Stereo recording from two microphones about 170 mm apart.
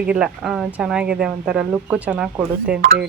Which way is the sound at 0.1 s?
5° right (ahead or behind).